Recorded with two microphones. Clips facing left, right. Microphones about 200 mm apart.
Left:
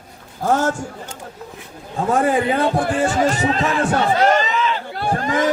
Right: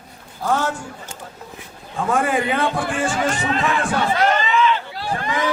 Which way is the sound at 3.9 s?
35° left (ahead or behind).